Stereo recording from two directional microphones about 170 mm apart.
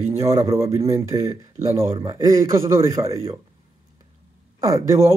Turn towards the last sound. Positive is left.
turn(degrees=-20)  # may be behind; listen again after turning